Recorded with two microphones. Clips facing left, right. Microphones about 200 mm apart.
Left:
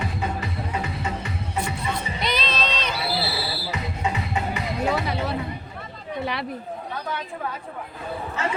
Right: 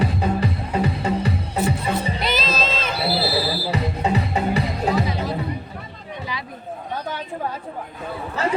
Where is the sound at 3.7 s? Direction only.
35° right (ahead or behind).